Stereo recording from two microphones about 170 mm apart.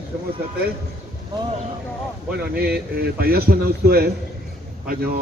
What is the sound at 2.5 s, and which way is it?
A man's voice, 65° right (ahead or behind).